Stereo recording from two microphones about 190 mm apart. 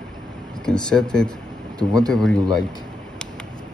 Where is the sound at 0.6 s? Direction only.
5° left (ahead or behind).